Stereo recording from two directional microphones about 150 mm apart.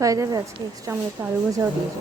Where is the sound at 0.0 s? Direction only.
20° right (ahead or behind).